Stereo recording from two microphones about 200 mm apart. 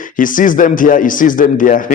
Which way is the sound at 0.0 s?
40° left (ahead or behind).